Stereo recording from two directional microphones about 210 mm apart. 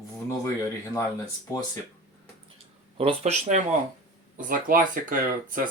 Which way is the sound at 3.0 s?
30° right (ahead or behind).